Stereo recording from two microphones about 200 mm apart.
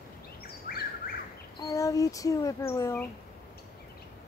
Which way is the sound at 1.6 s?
15° left (ahead or behind).